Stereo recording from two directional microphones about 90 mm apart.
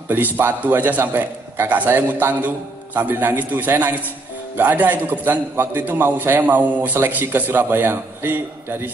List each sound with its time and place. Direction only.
0.1 s a man's voice: 20° right (ahead or behind)